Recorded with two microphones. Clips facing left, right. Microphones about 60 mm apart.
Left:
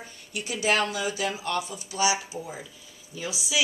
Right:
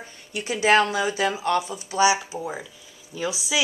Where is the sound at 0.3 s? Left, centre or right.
Right.